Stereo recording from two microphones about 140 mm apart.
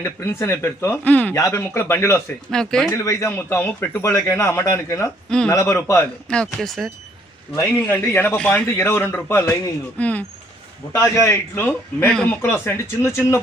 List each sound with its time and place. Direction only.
0.0 s a man's voice: 20° left (ahead or behind)
2.5 s speech: 5° left (ahead or behind)
2.9 s speech: 20° left (ahead or behind)
6.2 s speech: 5° left (ahead or behind)
8.1 s a man's voice: 15° left (ahead or behind)